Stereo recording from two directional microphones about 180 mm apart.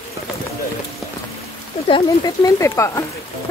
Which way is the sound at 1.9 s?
25° left (ahead or behind).